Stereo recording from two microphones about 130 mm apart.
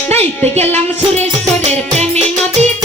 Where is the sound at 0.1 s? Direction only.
55° right (ahead or behind).